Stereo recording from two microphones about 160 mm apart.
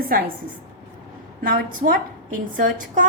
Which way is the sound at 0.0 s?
65° right (ahead or behind).